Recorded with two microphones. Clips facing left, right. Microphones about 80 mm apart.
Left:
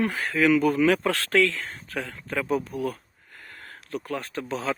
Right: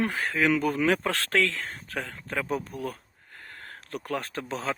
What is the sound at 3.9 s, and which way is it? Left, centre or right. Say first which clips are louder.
Speech: left 1 dB; right.